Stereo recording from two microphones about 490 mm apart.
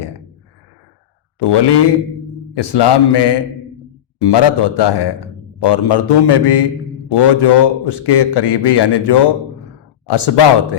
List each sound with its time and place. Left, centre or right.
1.4 s a man's voice: left